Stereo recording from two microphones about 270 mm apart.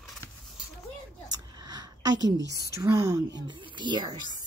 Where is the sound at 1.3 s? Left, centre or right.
Centre.